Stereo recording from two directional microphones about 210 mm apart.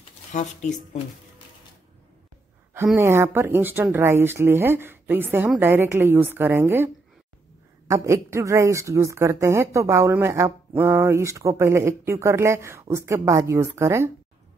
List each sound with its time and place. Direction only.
0.3 s speech: 35° left (ahead or behind)
2.7 s speech: 10° right (ahead or behind)
7.9 s speech: 15° right (ahead or behind)